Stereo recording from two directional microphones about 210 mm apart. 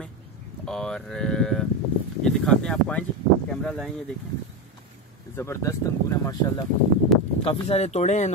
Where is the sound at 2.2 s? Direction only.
5° left (ahead or behind).